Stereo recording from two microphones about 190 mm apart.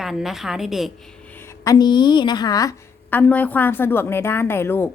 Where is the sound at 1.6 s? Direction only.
20° left (ahead or behind).